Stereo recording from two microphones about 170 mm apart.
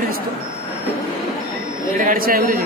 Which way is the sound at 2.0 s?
55° right (ahead or behind).